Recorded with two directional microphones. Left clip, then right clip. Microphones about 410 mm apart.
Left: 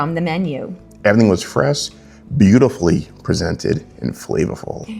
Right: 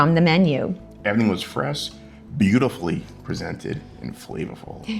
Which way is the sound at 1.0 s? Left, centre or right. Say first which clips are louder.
Left 9 dB; left.